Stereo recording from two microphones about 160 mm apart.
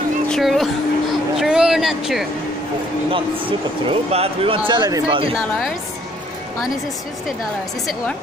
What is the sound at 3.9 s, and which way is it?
Speech, 35° right (ahead or behind).